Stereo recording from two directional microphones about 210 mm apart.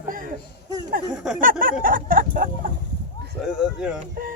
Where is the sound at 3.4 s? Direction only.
5° right (ahead or behind).